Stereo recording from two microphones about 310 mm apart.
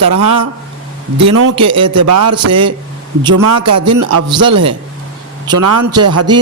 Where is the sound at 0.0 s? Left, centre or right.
Right.